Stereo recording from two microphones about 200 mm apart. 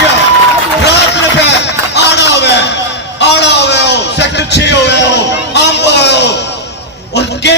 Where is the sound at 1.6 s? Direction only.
60° left (ahead or behind).